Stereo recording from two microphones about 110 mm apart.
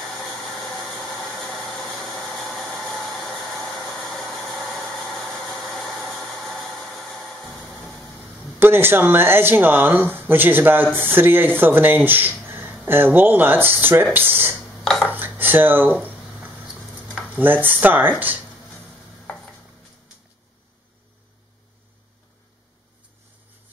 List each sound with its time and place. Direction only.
0.1 s a sound: centre (ahead or behind)
5.4 s engine: 5° left (ahead or behind)
5.9 s a sound: centre (ahead or behind)
8.5 s speech: 20° right (ahead or behind)
15.0 s dishes: 20° right (ahead or behind)
17.4 s speech: 15° right (ahead or behind)